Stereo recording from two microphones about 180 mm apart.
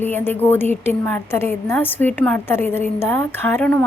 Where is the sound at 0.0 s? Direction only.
10° left (ahead or behind).